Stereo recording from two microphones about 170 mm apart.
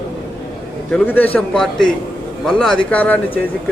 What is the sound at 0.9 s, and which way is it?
Speech, 10° left (ahead or behind).